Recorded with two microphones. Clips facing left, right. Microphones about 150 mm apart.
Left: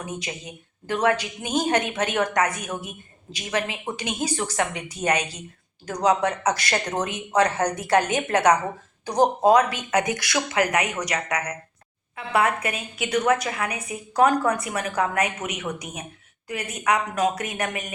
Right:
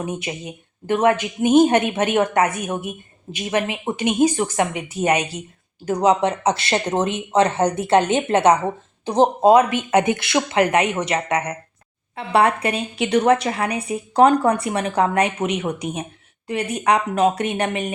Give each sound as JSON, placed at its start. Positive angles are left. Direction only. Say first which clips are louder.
{"t": 0.0, "sound": "a woman's voice", "louder": "right 6 dB", "side_deg": -25}
{"t": 6.0, "sound": "a woman's voice", "louder": "right 3 dB", "side_deg": -25}